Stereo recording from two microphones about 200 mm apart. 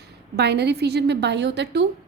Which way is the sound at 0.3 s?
55° right (ahead or behind).